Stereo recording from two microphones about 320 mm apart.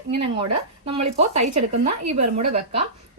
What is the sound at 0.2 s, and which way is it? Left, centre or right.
Speech, centre.